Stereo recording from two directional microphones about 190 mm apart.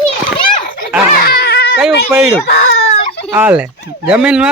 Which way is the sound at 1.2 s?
55° left (ahead or behind).